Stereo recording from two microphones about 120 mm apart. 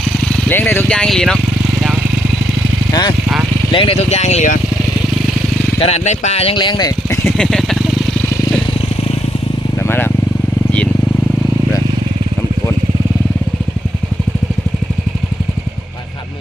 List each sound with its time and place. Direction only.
0.0 s speech: 10° left (ahead or behind)
2.9 s speech: 40° left (ahead or behind)
3.7 s speech: 50° left (ahead or behind); by 4.6 s 80° left
5.8 s speech: 65° left (ahead or behind)
6.6 s speech: 40° left (ahead or behind)
7.3 s vehicle: centre (ahead or behind)
9.7 s vehicle: 20° left (ahead or behind)